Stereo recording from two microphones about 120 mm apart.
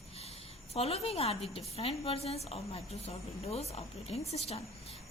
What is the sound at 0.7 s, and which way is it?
A woman's voice, 55° left (ahead or behind).